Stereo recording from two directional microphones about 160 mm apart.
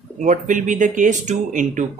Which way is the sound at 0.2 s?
55° right (ahead or behind).